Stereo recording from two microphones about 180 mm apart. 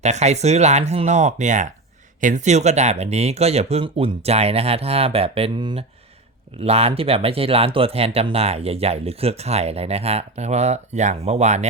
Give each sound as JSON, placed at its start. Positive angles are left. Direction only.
{"t": 0.0, "sound": "speech", "side_deg": -40}